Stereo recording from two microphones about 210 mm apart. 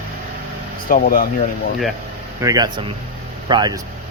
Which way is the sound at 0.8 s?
40° left (ahead or behind).